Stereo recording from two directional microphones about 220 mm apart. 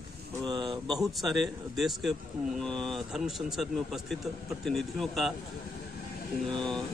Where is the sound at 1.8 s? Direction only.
Centre (ahead or behind).